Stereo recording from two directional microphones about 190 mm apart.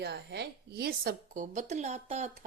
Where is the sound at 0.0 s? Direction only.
60° right (ahead or behind).